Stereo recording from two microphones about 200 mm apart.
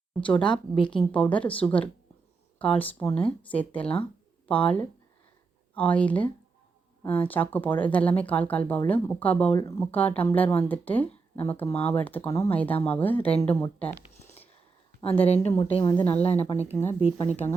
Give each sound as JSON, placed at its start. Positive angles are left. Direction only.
{"t": 0.2, "sound": "speech", "side_deg": 5}
{"t": 15.2, "sound": "speech", "side_deg": 30}
{"t": 15.8, "sound": "speech", "side_deg": 15}
{"t": 16.0, "sound": "speech", "side_deg": 30}